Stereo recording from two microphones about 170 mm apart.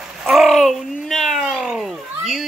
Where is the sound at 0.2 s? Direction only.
Centre (ahead or behind).